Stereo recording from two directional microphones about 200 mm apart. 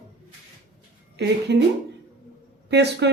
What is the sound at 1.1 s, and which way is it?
Speech, 60° right (ahead or behind).